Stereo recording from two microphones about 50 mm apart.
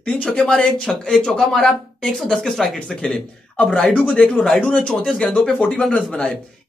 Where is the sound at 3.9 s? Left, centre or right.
Centre.